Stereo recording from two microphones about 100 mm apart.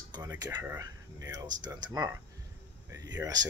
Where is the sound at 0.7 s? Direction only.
40° right (ahead or behind).